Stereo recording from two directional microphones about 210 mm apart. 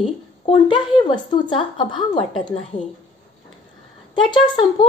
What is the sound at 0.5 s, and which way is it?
Speech, 20° left (ahead or behind).